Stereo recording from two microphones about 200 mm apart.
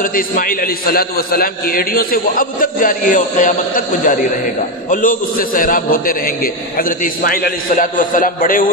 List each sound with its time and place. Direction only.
0.0 s a man's voice: 45° left (ahead or behind)